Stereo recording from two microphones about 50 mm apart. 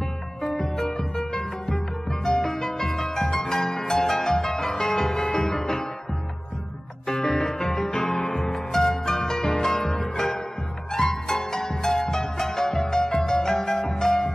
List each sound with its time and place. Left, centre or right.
0.6 s music: centre
2.2 s music: centre
7.1 s music: centre
7.9 s music: left
8.5 s music: centre